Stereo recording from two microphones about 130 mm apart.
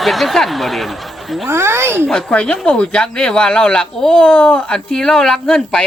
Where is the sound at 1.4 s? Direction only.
20° right (ahead or behind).